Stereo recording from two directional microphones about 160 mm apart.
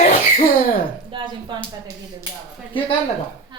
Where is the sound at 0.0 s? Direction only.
55° left (ahead or behind).